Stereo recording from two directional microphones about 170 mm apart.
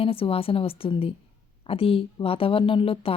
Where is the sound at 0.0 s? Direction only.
35° left (ahead or behind).